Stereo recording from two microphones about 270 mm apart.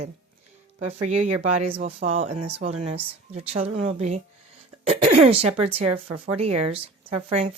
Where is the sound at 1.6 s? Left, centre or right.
Right.